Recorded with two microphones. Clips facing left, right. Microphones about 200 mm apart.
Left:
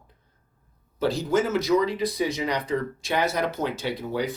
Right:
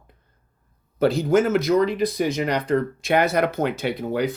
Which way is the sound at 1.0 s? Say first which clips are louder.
Right 5 dB; 60° right (ahead or behind).